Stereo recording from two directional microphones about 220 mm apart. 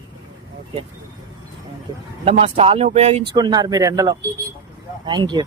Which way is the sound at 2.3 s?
25° right (ahead or behind).